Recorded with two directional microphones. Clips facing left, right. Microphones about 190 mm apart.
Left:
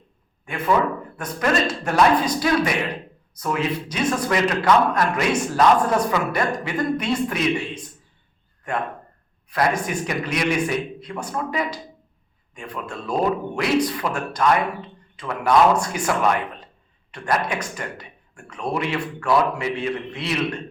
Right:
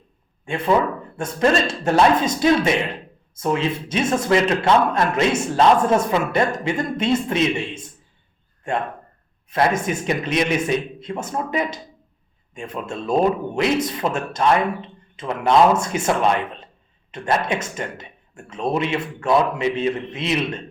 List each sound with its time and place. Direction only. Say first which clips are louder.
0.4 s a man's voice: right 2 dB; 30° right (ahead or behind)